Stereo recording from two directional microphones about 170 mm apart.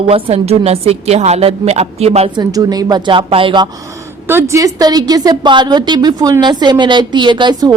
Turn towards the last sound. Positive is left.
turn(degrees=-25)  # may be behind; listen again after turning